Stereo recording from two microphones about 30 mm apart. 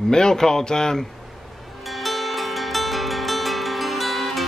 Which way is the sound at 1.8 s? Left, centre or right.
Centre.